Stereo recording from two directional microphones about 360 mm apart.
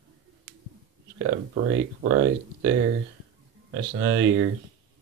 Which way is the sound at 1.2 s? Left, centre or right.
Right.